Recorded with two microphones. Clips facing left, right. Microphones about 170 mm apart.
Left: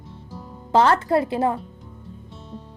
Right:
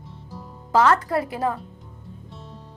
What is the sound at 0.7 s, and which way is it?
Speech, 30° left (ahead or behind).